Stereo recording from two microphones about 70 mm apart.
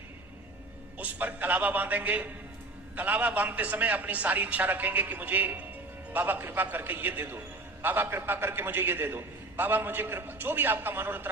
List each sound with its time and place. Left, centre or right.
0.9 s a man's voice: right